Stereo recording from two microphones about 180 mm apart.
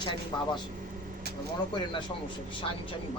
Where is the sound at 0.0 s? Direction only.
25° left (ahead or behind).